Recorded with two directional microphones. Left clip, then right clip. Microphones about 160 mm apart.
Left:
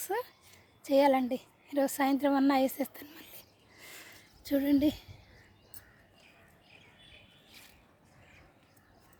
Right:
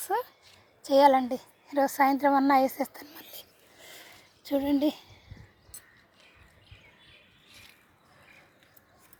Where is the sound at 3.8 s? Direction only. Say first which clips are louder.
Right 1 dB; 15° left (ahead or behind).